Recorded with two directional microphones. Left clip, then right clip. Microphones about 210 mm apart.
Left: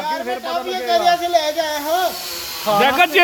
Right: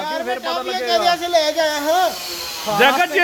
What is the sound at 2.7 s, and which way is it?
Speech, 55° left (ahead or behind).